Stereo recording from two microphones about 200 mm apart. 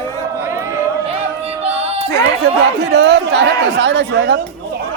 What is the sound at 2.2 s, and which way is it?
Speech, 60° right (ahead or behind).